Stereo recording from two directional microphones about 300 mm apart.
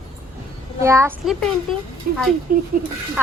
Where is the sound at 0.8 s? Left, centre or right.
Centre.